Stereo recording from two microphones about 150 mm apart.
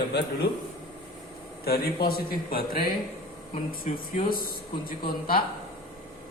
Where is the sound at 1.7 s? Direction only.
90° left; by 5.4 s 75° left (ahead or behind).